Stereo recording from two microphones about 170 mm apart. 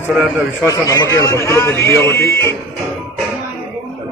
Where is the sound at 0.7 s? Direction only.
20° left (ahead or behind).